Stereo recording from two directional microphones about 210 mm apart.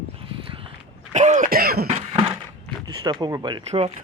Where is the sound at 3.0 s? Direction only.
20° right (ahead or behind).